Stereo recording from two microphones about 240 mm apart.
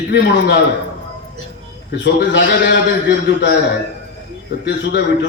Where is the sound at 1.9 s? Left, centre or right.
Left.